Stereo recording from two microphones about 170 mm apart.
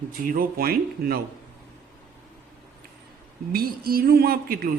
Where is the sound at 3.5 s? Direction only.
60° right (ahead or behind).